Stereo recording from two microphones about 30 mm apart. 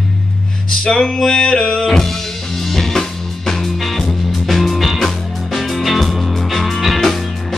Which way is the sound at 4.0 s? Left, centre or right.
Centre.